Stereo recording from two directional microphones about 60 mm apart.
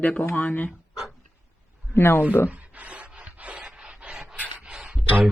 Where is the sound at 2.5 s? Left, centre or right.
Right.